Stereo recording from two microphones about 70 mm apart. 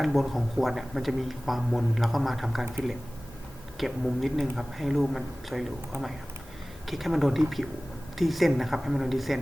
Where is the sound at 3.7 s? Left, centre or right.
Centre.